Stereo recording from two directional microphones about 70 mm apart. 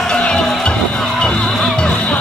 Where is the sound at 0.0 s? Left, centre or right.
Centre.